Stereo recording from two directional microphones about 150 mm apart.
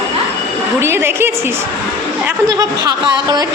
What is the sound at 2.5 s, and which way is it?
Speech, 25° right (ahead or behind).